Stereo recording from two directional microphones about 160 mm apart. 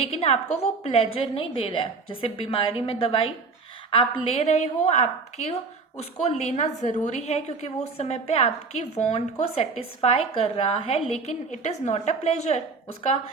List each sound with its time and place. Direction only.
0.0 s a woman's voice: 40° left (ahead or behind)